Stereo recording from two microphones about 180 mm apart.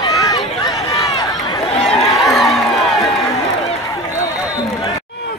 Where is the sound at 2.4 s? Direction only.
Centre (ahead or behind).